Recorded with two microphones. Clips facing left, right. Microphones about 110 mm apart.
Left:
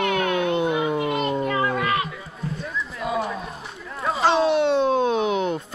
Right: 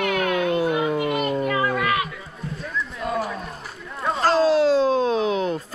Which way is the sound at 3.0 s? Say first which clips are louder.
Left 1 dB; 5° left (ahead or behind).